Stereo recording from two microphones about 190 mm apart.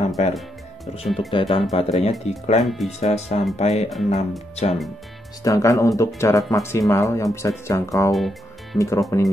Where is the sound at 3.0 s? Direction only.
35° left (ahead or behind).